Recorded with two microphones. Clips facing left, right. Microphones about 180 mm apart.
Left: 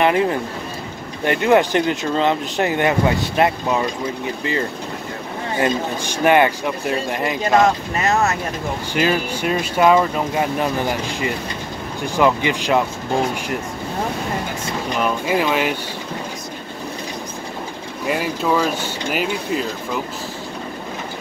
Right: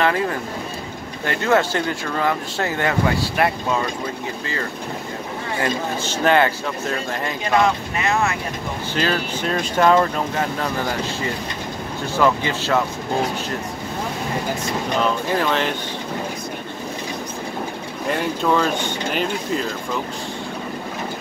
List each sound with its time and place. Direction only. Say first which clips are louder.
0.0 s speech: left 3 dB; 20° left (ahead or behind)
5.6 s speech: left 3 dB; 15° left (ahead or behind)
7.5 s speech: left 2 dB; 40° left (ahead or behind)
8.9 s speech: left 3 dB; 15° left (ahead or behind)
15.0 s speech: left 4 dB; 10° left (ahead or behind)
18.0 s speech: even; 5° left (ahead or behind)